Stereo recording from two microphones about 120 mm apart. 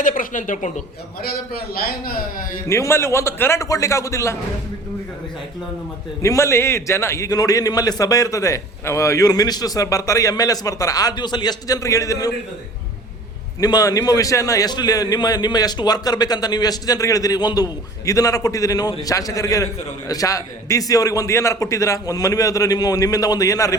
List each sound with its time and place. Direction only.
0.0 s speech: 90° left
2.6 s a man's voice: 25° left (ahead or behind)
6.2 s a man's voice: 25° left (ahead or behind)
13.6 s a man's voice: 30° left (ahead or behind)